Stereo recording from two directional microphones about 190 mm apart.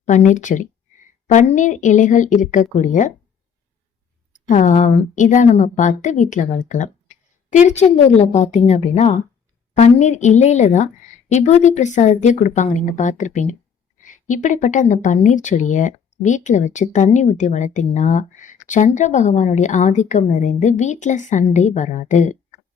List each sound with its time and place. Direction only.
0.0 s speech: 40° left (ahead or behind)
4.3 s speech: 40° left (ahead or behind)